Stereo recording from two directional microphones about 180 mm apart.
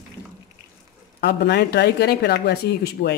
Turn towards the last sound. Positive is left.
turn(degrees=65)  # may be behind; listen again after turning